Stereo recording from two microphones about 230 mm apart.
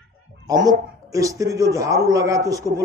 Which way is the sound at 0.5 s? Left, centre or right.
Centre.